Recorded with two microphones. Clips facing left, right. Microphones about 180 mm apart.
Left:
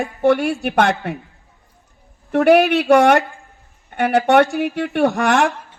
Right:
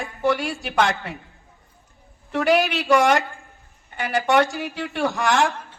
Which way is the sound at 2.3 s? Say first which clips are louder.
Left 7 dB; 60° left (ahead or behind).